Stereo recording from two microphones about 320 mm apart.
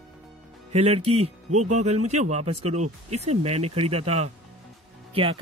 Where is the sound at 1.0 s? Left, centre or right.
Right.